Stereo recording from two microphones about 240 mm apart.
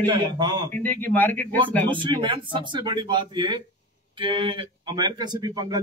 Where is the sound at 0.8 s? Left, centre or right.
Centre.